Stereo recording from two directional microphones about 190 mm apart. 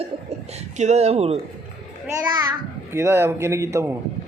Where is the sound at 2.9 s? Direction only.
15° right (ahead or behind).